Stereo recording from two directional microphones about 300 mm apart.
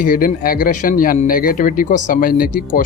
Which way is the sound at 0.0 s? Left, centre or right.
Left.